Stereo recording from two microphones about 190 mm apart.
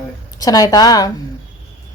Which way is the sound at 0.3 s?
20° left (ahead or behind).